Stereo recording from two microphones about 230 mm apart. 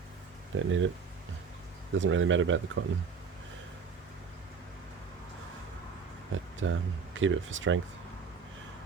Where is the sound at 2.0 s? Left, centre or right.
Right.